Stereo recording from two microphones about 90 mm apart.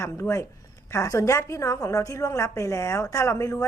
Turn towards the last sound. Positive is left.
turn(degrees=40)  # may be behind; listen again after turning